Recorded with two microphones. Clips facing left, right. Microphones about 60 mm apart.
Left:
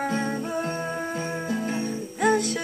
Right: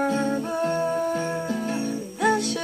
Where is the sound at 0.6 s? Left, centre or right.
Left.